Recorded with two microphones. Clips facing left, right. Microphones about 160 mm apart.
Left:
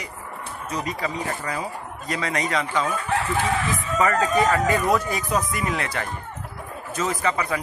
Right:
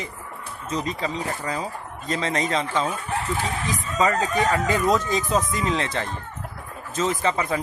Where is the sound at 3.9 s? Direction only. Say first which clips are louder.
Left 1 dB; 20° right (ahead or behind).